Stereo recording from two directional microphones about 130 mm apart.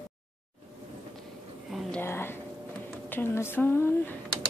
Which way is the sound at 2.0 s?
15° left (ahead or behind).